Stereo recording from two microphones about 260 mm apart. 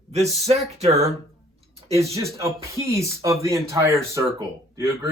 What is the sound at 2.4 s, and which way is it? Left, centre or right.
Speech, centre.